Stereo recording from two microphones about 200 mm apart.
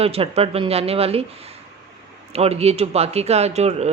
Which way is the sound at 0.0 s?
30° right (ahead or behind).